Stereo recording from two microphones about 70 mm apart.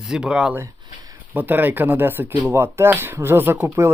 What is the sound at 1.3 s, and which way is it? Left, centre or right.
Speech, right.